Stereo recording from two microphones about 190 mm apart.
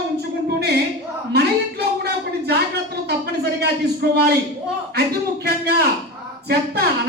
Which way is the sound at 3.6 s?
60° right (ahead or behind).